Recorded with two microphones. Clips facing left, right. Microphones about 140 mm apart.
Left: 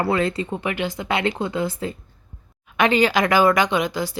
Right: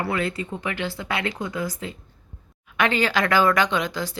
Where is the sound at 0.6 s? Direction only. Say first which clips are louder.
Left 2 dB; 15° left (ahead or behind).